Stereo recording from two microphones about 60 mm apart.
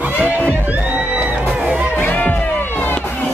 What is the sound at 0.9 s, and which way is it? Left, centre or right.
Music, centre.